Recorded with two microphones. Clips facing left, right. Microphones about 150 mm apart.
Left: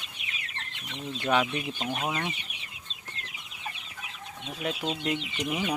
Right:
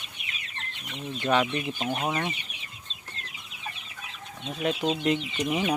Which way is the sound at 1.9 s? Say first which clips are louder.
Right 2 dB; 20° right (ahead or behind).